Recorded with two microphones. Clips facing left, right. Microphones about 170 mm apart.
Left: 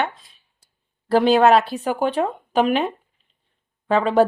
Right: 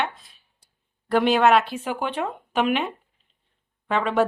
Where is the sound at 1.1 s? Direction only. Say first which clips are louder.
Left 4 dB; 35° left (ahead or behind).